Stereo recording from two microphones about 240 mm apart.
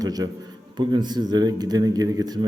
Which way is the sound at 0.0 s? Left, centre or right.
Centre.